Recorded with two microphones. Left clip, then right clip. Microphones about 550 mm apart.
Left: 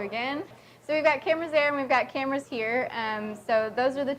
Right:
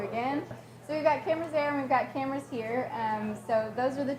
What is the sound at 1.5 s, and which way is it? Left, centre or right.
Speech, left.